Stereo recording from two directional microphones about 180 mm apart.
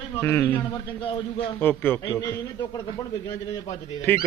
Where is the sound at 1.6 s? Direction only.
10° left (ahead or behind).